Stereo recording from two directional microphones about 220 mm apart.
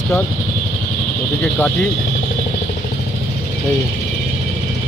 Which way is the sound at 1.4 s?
5° left (ahead or behind).